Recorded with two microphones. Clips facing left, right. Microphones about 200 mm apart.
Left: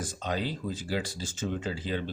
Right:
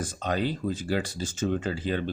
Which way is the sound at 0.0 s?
55° right (ahead or behind).